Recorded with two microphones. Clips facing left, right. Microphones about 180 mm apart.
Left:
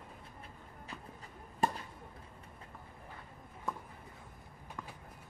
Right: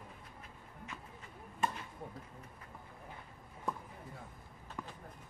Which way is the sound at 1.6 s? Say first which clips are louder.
Left 3 dB; 35° left (ahead or behind).